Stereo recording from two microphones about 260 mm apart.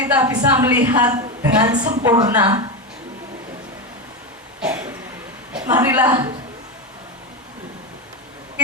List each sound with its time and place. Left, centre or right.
0.0 s a woman's voice: centre
1.8 s a woman's voice: right
2.0 s a woman's voice: centre
4.6 s throat clearing: centre
5.6 s a woman's voice: centre